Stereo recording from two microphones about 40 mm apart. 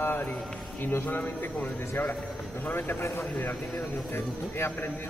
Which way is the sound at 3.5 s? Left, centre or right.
Centre.